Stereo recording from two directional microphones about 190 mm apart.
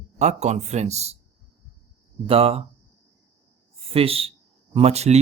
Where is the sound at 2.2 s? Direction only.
30° right (ahead or behind).